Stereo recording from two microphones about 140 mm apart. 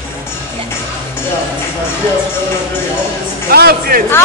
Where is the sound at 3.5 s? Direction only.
90° right.